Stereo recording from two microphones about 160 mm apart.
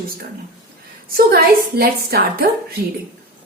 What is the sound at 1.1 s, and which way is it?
A woman's voice, 75° right (ahead or behind).